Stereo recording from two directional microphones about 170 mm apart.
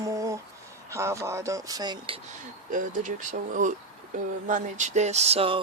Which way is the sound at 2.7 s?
50° right (ahead or behind).